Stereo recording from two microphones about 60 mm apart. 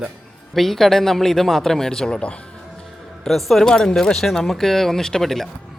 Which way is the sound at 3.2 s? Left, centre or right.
Centre.